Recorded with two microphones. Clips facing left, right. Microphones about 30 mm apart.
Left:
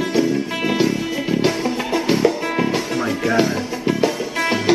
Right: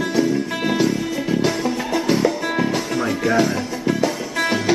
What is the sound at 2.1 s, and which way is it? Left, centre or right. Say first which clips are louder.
Music: left 2 dB; centre.